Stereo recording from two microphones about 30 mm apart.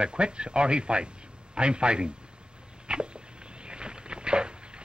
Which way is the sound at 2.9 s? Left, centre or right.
Right.